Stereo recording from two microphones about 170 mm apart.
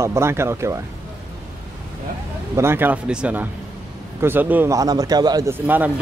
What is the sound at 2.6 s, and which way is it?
Speech, 15° right (ahead or behind).